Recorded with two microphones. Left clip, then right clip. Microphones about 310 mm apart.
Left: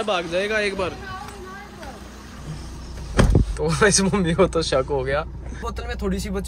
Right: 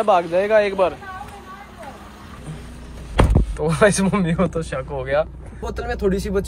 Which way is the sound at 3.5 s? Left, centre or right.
Centre.